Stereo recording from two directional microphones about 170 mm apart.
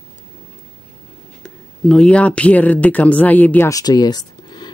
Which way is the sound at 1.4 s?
5° left (ahead or behind).